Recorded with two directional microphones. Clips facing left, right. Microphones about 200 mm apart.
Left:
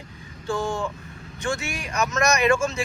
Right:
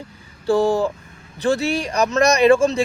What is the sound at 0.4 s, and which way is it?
Speech, 35° right (ahead or behind).